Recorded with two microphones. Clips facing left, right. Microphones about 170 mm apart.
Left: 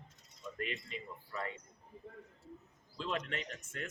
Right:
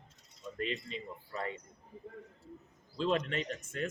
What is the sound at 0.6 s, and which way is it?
Speech, 30° right (ahead or behind).